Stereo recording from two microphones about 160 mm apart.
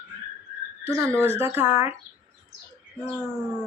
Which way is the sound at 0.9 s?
15° right (ahead or behind).